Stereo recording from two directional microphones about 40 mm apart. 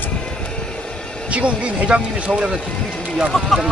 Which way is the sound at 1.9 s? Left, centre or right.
Right.